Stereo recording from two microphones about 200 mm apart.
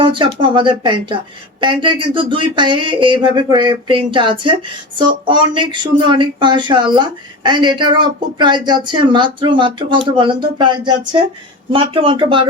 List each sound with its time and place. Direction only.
0.0 s speech: 25° right (ahead or behind)